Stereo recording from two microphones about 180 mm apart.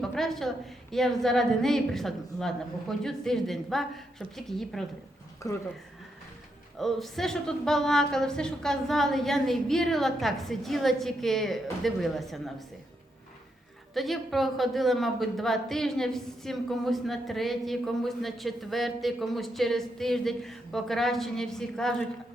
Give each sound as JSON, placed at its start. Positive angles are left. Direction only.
{"t": 0.0, "sound": "a woman's voice", "side_deg": 0}
{"t": 5.4, "sound": "speech", "side_deg": 15}
{"t": 6.7, "sound": "a woman's voice", "side_deg": 0}
{"t": 13.9, "sound": "a woman's voice", "side_deg": 0}